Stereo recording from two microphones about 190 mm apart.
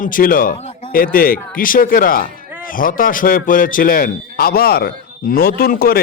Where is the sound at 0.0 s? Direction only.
45° left (ahead or behind).